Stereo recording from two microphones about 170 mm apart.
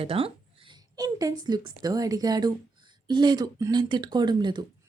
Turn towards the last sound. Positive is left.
turn(degrees=-25)  # may be behind; listen again after turning